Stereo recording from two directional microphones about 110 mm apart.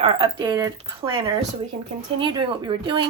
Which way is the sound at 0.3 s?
35° right (ahead or behind).